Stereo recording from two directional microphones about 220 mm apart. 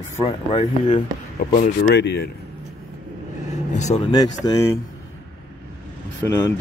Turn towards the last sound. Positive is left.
turn(degrees=10)  # may be behind; listen again after turning